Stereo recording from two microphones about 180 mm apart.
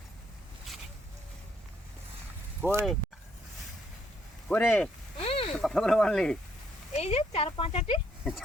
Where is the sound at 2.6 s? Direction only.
15° right (ahead or behind).